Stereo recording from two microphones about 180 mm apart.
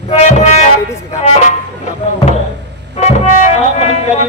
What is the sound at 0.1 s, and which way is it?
Music, 35° left (ahead or behind).